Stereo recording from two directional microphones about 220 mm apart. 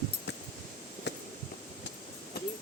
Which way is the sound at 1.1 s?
50° left (ahead or behind).